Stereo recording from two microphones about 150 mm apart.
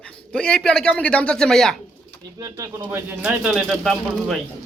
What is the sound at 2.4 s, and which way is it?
Speech, 20° right (ahead or behind).